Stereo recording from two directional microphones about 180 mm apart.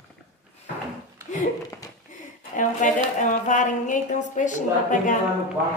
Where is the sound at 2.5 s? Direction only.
45° left (ahead or behind).